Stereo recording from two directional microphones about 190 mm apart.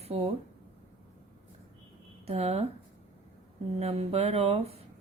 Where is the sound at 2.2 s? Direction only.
30° right (ahead or behind).